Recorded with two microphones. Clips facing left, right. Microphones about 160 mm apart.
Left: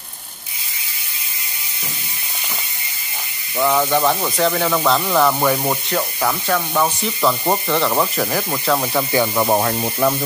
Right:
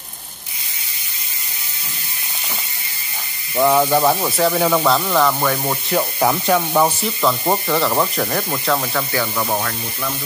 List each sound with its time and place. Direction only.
3.5 s speech: 15° right (ahead or behind); by 5.8 s 10° left (ahead or behind)
6.1 s speech: 20° right (ahead or behind)
7.0 s speech: centre (ahead or behind)
8.9 s speech: 20° left (ahead or behind)
9.8 s speech: 45° left (ahead or behind)